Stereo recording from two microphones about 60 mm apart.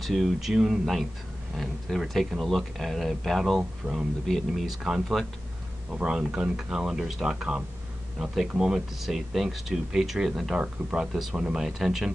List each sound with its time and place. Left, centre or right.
0.0 s speech: centre
3.8 s speech: centre
4.3 s speech: centre
5.9 s speech: centre
10.6 s speech: centre